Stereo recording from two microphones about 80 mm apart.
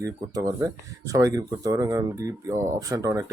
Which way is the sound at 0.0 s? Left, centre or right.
Right.